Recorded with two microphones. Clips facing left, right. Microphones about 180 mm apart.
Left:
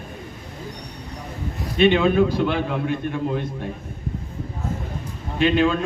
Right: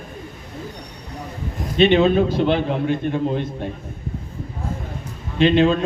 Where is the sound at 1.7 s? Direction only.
30° right (ahead or behind).